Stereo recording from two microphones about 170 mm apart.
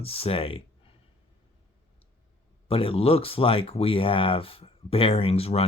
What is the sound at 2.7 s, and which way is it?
Speech, 35° left (ahead or behind).